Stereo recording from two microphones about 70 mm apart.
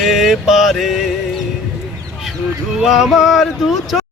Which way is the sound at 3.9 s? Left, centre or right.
Centre.